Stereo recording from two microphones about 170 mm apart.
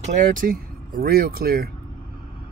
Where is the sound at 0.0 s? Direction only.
45° right (ahead or behind).